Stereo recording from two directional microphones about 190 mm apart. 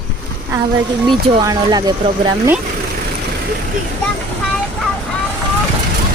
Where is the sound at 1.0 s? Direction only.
20° right (ahead or behind).